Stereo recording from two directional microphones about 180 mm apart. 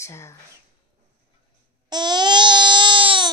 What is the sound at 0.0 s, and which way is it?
Speech, 15° left (ahead or behind).